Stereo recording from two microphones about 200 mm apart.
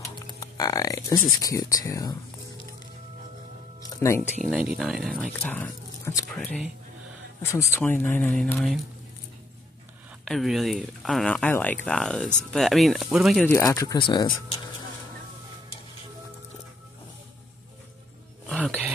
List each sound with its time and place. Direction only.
0.4 s speech: 20° left (ahead or behind)
4.0 s speech: 15° left (ahead or behind)
4.4 s speech: centre (ahead or behind)
10.2 s speech: centre (ahead or behind)
13.5 s speech: 10° left (ahead or behind)
18.5 s a sound: 5° left (ahead or behind)